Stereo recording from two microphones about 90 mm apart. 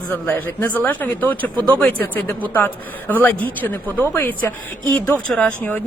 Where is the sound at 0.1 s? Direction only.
20° left (ahead or behind).